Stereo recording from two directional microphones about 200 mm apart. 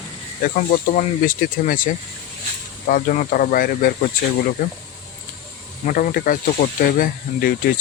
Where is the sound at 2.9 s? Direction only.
40° left (ahead or behind).